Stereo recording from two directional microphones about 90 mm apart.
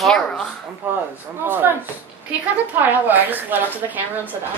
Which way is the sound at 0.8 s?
20° right (ahead or behind).